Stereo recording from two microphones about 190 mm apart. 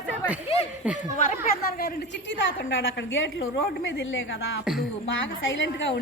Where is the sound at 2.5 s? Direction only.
80° left.